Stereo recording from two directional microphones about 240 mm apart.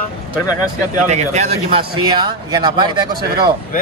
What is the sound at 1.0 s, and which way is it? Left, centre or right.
Speech, right.